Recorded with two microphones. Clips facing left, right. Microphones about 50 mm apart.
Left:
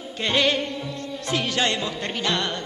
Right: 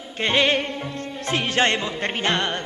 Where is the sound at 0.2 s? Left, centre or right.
Right.